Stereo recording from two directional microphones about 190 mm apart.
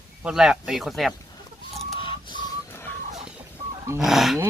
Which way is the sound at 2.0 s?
25° left (ahead or behind).